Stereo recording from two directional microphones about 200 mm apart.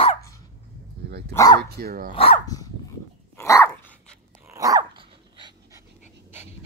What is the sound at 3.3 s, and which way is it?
Dog, 15° left (ahead or behind).